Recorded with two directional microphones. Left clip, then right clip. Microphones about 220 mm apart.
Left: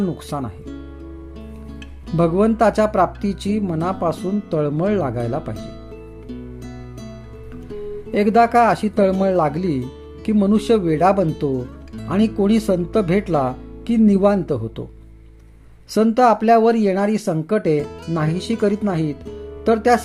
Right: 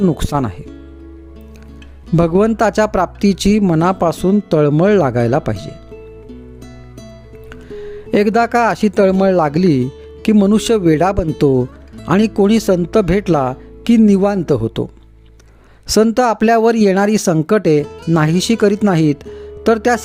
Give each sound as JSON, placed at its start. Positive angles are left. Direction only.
{"t": 0.2, "sound": "speech", "side_deg": -50}
{"t": 2.1, "sound": "speech", "side_deg": -50}
{"t": 8.1, "sound": "speech", "side_deg": -50}
{"t": 11.5, "sound": "music", "side_deg": 0}
{"t": 12.0, "sound": "speech", "side_deg": -50}
{"t": 15.9, "sound": "speech", "side_deg": -50}